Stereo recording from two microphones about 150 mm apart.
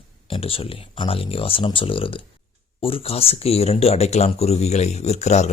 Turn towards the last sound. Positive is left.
turn(degrees=50)  # may be behind; listen again after turning